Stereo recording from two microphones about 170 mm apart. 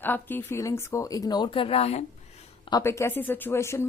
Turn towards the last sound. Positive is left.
turn(degrees=15)  # may be behind; listen again after turning